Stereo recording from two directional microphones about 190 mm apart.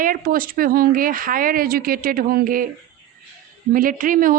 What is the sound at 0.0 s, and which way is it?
Speech, 45° right (ahead or behind).